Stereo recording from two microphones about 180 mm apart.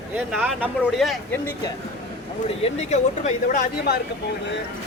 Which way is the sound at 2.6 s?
40° left (ahead or behind).